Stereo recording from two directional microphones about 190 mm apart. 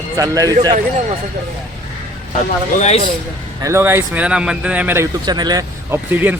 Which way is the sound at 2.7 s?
35° left (ahead or behind).